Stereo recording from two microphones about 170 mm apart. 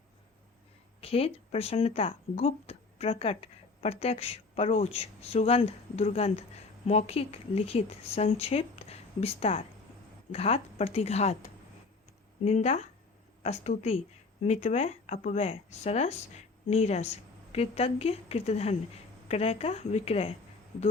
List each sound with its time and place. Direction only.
1.0 s speech: 35° left (ahead or behind)